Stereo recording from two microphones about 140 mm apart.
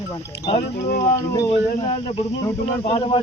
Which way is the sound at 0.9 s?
90° left.